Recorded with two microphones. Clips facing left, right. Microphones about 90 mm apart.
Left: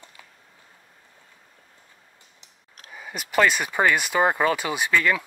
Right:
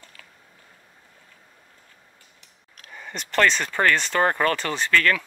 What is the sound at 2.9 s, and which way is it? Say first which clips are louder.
Speech: even; 5° left (ahead or behind).